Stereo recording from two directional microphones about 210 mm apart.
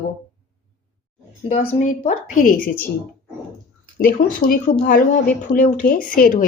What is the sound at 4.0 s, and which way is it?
A woman's voice, 40° left (ahead or behind).